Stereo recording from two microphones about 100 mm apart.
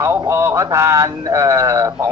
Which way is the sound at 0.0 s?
30° right (ahead or behind).